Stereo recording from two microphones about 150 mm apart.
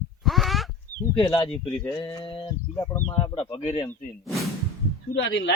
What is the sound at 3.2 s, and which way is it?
Speech, 40° left (ahead or behind).